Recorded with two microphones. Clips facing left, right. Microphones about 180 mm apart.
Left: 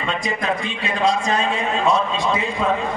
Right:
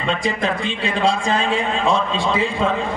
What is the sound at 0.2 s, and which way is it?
A man's voice, 30° right (ahead or behind).